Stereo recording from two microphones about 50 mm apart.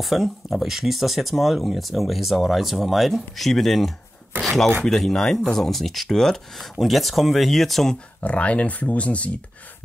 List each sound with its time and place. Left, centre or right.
0.0 s speech: centre
8.2 s speech: left